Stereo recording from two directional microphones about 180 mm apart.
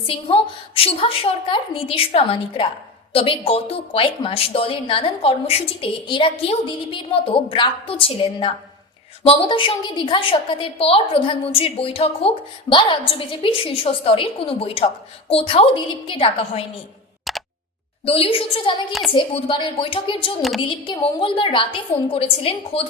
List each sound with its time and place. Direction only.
0.1 s a woman's voice: 30° left (ahead or behind)
17.3 s a sound: centre (ahead or behind)
18.0 s a woman's voice: 30° left (ahead or behind)